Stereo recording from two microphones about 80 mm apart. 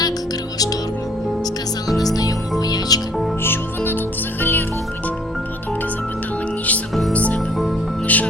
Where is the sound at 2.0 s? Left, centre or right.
Left.